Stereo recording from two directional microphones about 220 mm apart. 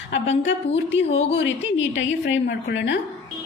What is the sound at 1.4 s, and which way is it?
A woman's voice, 60° left (ahead or behind).